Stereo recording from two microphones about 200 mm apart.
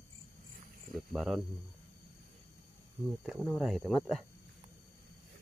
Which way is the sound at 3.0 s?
5° right (ahead or behind).